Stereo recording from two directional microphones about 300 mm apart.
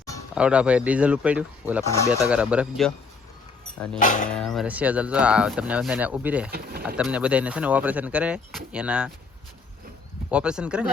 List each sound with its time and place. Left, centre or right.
0.3 s speech: centre
4.0 s speech: left
4.3 s speech: centre
6.5 s speech: right
6.8 s speech: centre
10.3 s speech: centre